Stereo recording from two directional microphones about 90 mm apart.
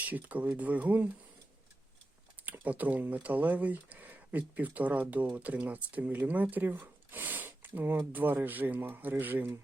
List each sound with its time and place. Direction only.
0.0 s speech: 15° right (ahead or behind)
2.5 s speech: 20° right (ahead or behind)